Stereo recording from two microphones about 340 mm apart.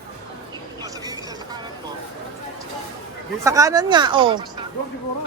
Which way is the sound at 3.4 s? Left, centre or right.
Centre.